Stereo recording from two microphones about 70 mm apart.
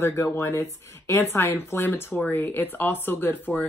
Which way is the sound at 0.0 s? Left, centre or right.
Left.